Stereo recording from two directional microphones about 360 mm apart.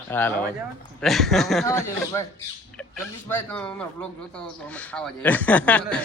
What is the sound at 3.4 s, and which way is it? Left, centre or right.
Speech, centre.